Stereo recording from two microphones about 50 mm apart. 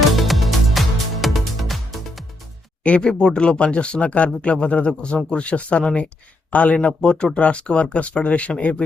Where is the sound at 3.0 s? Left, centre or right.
Centre.